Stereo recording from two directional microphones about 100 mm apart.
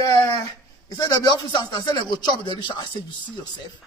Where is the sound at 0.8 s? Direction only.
35° left (ahead or behind).